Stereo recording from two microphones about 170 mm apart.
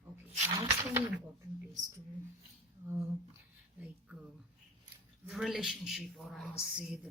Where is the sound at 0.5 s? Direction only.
20° right (ahead or behind).